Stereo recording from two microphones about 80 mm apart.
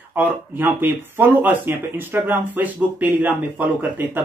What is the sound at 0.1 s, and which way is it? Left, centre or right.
Speech, right.